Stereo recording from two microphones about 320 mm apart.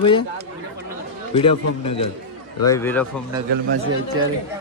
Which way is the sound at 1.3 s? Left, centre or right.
Centre.